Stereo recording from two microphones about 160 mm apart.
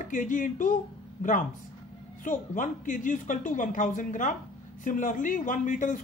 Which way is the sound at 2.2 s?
55° left (ahead or behind).